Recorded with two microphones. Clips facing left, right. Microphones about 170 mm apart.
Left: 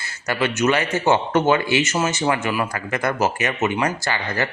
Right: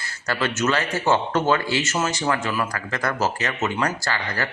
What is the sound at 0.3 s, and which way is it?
A man's voice, 15° left (ahead or behind).